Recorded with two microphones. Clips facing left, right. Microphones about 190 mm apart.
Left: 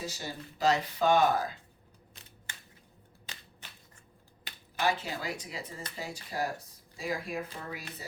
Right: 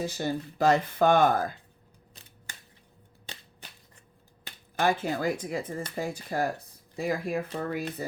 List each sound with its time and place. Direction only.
0.0 s speech: 55° right (ahead or behind)
4.8 s speech: 50° right (ahead or behind)